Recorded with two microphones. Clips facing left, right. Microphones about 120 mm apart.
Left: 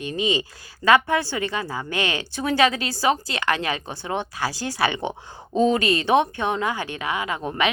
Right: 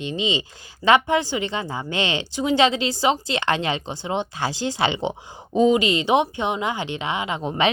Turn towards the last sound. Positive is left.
turn(degrees=-20)  # may be behind; listen again after turning